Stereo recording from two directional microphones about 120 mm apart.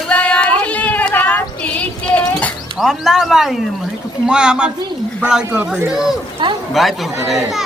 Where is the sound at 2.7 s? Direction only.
5° right (ahead or behind).